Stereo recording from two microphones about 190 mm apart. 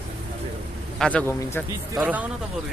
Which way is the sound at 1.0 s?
10° left (ahead or behind).